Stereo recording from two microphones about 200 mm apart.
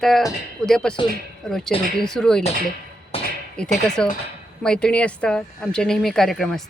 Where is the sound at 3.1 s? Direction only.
30° left (ahead or behind).